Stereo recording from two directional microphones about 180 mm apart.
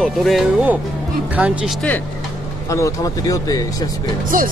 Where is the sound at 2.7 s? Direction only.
20° left (ahead or behind).